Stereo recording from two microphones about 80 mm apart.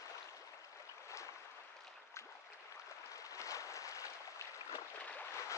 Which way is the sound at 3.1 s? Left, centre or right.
Left.